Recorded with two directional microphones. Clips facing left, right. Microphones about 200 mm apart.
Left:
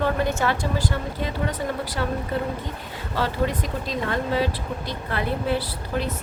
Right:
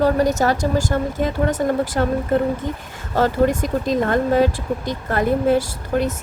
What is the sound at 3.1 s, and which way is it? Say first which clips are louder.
A woman's voice: right 8 dB; 45° right (ahead or behind).